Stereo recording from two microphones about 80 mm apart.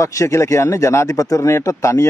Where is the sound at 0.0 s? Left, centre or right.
Left.